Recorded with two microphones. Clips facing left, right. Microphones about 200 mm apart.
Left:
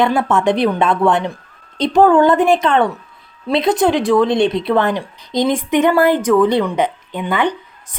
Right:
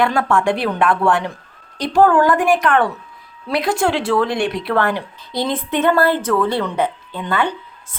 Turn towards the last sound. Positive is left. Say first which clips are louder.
# left 3 dB
turn(degrees=15)  # may be behind; listen again after turning